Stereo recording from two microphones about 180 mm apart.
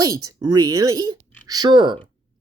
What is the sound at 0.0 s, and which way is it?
Speech, 20° right (ahead or behind).